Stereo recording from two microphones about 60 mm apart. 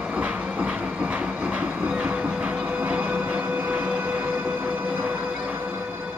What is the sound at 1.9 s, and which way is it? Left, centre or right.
Music, right.